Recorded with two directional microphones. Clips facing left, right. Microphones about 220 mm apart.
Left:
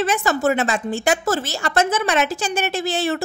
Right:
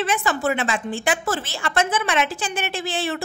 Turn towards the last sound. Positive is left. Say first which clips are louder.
# left 4 dB
turn(degrees=40)  # may be behind; listen again after turning